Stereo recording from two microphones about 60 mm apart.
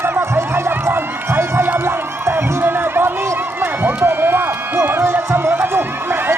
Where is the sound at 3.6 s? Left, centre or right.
Right.